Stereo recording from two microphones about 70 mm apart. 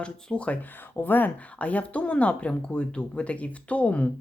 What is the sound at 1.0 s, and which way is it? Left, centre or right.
Speech, left.